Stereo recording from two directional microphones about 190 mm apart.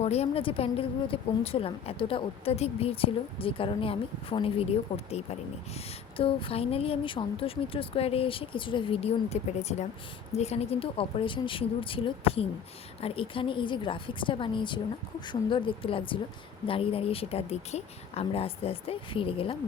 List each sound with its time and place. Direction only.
0.0 s a woman's voice: 35° left (ahead or behind)
6.1 s a woman's voice: 30° left (ahead or behind)